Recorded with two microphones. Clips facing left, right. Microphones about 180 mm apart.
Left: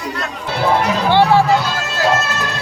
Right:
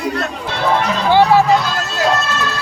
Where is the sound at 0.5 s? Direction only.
10° left (ahead or behind).